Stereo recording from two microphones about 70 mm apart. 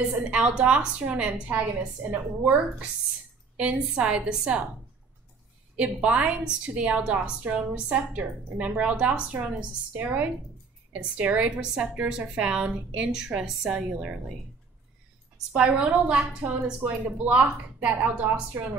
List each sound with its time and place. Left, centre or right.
0.3 s a woman's voice: centre
5.8 s a woman's voice: centre
15.5 s a woman's voice: centre